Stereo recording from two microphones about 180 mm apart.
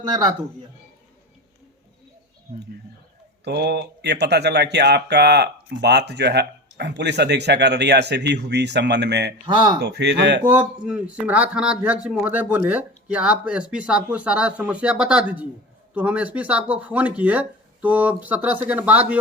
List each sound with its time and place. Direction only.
0.0 s speech: 25° right (ahead or behind)
3.4 s speech: 70° right (ahead or behind)
9.5 s speech: 25° right (ahead or behind)
9.8 s speech: 70° right (ahead or behind)
10.4 s speech: 10° right (ahead or behind)